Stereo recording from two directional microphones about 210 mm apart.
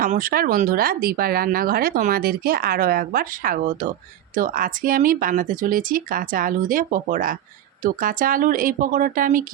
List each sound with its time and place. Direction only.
0.0 s speech: 40° right (ahead or behind)